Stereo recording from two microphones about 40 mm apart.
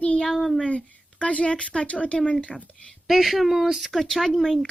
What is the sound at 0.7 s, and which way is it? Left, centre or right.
Speech, left.